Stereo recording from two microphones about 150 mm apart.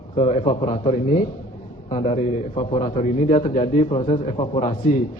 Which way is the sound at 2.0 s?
50° left (ahead or behind).